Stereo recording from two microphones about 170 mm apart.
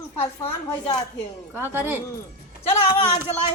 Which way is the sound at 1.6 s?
15° right (ahead or behind).